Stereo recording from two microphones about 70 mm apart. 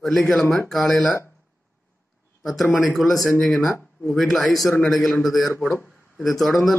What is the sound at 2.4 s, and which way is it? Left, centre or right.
Speech, centre.